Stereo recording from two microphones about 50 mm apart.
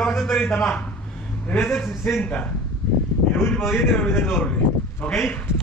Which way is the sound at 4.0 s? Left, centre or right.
Left.